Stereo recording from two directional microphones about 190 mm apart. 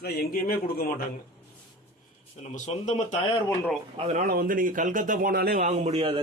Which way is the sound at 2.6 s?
35° left (ahead or behind).